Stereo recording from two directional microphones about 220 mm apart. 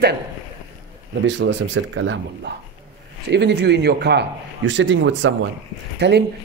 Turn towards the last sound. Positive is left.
turn(degrees=-50)  # may be behind; listen again after turning